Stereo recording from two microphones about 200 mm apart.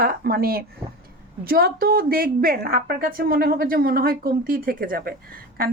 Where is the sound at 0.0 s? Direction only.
50° right (ahead or behind).